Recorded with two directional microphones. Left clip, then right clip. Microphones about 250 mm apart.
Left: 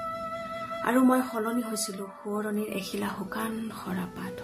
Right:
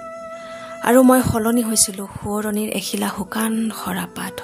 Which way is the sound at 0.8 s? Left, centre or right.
Right.